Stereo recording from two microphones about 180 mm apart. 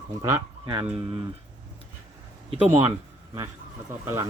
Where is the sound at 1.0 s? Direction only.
30° right (ahead or behind).